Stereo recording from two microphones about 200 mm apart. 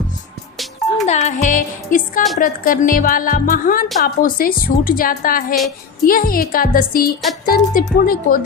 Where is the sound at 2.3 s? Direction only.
45° left (ahead or behind).